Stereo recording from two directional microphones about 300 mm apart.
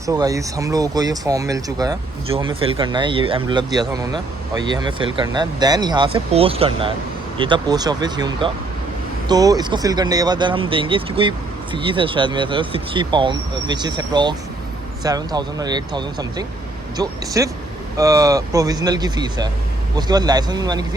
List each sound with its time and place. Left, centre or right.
0.0 s speech: centre